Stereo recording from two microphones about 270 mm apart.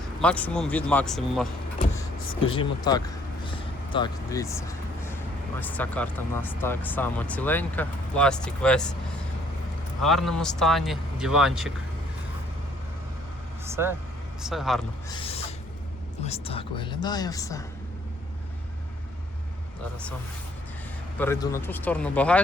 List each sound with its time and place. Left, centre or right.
0.2 s speech: centre
2.5 s speech: centre
3.4 s vehicle: centre
5.5 s speech: centre
10.0 s speech: centre
13.7 s vehicle: centre
14.4 s speech: centre
15.1 s owl: centre
16.2 s speech: left
21.2 s speech: centre